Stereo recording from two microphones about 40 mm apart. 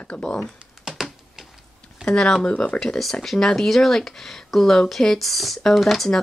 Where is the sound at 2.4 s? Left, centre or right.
Left.